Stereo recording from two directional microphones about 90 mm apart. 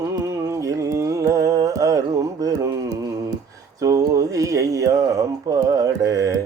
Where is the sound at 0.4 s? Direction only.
35° right (ahead or behind).